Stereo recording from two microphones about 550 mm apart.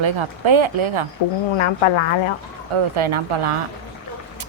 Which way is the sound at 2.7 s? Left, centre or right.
Right.